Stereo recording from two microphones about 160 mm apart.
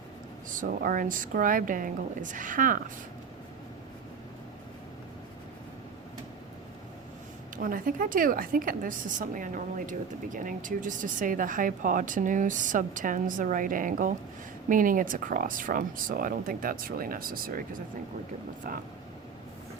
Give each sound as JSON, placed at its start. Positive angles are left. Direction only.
{"t": 0.5, "sound": "a woman's voice", "side_deg": -60}
{"t": 7.5, "sound": "a woman's voice", "side_deg": -60}
{"t": 18.7, "sound": "a woman's voice", "side_deg": -60}